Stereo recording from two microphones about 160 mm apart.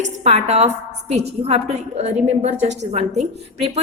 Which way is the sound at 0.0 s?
45° right (ahead or behind).